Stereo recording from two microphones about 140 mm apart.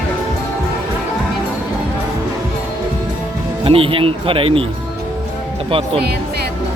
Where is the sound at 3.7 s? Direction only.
40° right (ahead or behind).